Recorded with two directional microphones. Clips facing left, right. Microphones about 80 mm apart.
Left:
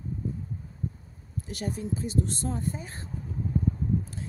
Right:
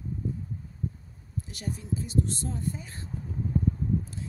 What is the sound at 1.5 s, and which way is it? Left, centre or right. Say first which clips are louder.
Speech: left 3 dB; left.